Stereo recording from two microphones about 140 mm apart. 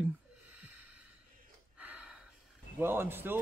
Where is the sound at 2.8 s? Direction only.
15° right (ahead or behind).